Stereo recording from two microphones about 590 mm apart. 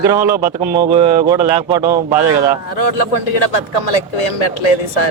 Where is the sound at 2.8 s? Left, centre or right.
Left.